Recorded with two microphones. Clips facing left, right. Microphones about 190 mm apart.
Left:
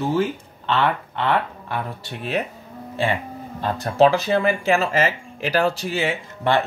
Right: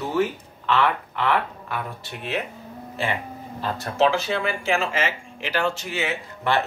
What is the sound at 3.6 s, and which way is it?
Speech, 35° left (ahead or behind).